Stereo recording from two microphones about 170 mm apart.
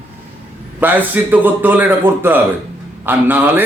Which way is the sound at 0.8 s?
10° right (ahead or behind).